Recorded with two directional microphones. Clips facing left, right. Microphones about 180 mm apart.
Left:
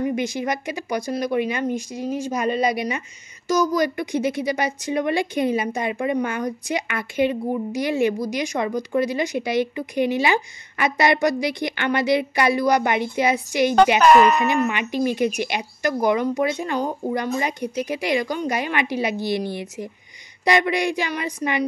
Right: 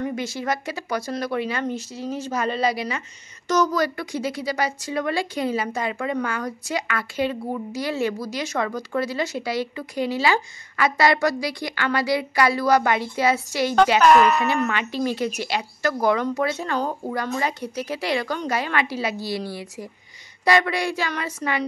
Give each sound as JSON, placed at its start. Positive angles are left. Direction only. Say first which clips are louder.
{"t": 0.0, "sound": "a woman's voice", "louder": "left 4 dB", "side_deg": 15}
{"t": 14.0, "sound": "speech", "louder": "left 1 dB", "side_deg": 0}
{"t": 14.3, "sound": "a woman's voice", "louder": "left 2 dB", "side_deg": 15}